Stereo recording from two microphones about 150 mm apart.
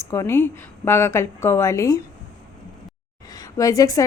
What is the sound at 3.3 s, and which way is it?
Speech, 25° left (ahead or behind).